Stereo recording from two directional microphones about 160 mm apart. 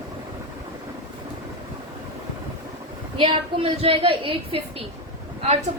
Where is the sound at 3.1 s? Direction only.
35° right (ahead or behind).